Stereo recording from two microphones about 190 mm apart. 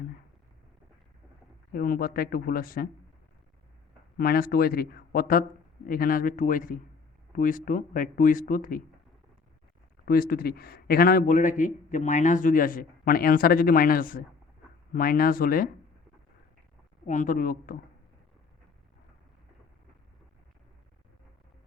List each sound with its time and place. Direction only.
1.7 s speech: 50° left (ahead or behind)
4.2 s speech: 50° left (ahead or behind)
10.1 s speech: 50° left (ahead or behind)
17.1 s speech: 45° left (ahead or behind)